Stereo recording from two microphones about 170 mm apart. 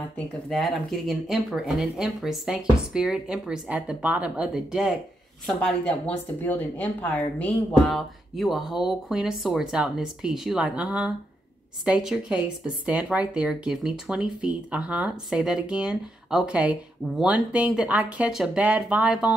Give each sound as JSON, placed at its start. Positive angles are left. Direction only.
{"t": 0.5, "sound": "speech", "side_deg": 0}
{"t": 5.6, "sound": "speech", "side_deg": 10}